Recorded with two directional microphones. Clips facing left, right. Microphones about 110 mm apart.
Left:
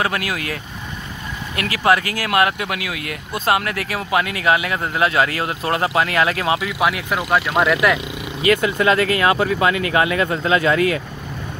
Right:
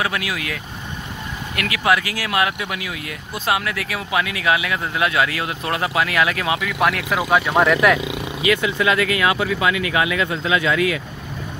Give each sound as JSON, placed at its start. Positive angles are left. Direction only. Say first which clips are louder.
{"t": 0.0, "sound": "speech", "louder": "left 2 dB", "side_deg": 45}
{"t": 1.6, "sound": "speech", "louder": "left 2 dB", "side_deg": 40}
{"t": 6.8, "sound": "speech", "louder": "even", "side_deg": 5}
{"t": 8.4, "sound": "speech", "louder": "left 3 dB", "side_deg": 45}